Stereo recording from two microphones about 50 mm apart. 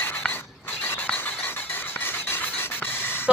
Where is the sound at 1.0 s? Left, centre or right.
Left.